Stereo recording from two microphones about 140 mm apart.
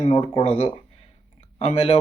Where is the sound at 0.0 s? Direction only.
45° left (ahead or behind).